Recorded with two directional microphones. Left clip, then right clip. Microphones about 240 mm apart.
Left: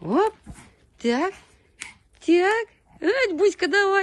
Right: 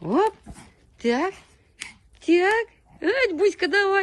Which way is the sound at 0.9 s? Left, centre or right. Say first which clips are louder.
Even; centre.